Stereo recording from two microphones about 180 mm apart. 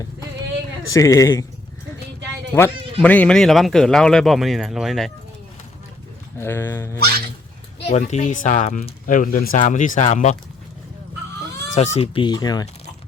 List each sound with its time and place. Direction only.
0.9 s speech: 20° left (ahead or behind)
2.5 s speech: 15° left (ahead or behind)
6.4 s speech: 15° left (ahead or behind)
7.9 s speech: 40° left (ahead or behind)
11.7 s speech: 35° left (ahead or behind)